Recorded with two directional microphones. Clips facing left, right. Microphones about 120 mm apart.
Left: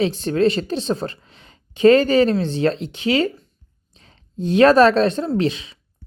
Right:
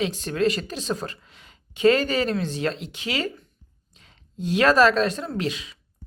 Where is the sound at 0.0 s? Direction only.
30° left (ahead or behind).